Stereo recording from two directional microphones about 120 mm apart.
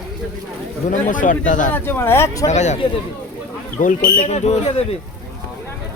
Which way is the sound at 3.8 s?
90° left.